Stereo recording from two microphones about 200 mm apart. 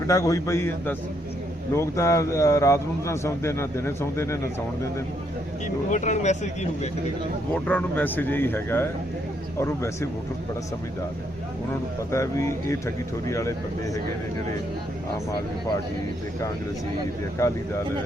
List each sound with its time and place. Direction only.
0.1 s a man's voice: 15° left (ahead or behind)
5.9 s speech: 35° left (ahead or behind)
7.5 s a man's voice: 10° left (ahead or behind)
12.1 s a man's voice: 15° left (ahead or behind)
17.4 s a man's voice: 15° left (ahead or behind)